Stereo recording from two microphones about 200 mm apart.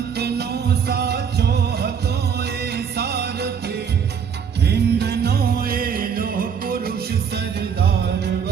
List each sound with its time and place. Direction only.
0.2 s music: 55° right (ahead or behind)
4.7 s music: 55° right (ahead or behind)